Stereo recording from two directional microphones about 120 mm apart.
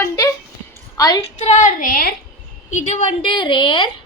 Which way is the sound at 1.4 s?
80° left.